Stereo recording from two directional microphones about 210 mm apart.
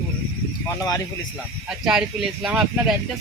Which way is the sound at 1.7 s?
5° right (ahead or behind).